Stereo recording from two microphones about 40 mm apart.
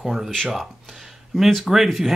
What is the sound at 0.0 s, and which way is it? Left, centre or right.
Speech, centre.